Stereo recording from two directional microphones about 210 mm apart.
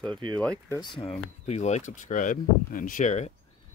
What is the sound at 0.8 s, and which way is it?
Speech, 25° left (ahead or behind).